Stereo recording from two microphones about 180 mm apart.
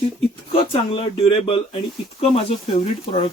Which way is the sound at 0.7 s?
30° left (ahead or behind).